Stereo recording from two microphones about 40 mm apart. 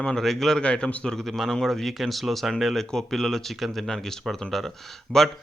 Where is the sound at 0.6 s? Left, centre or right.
Left.